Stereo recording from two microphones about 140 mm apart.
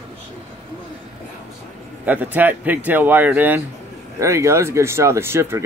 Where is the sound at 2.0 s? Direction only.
10° right (ahead or behind).